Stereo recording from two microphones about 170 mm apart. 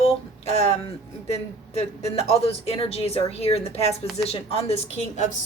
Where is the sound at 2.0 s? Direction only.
35° left (ahead or behind).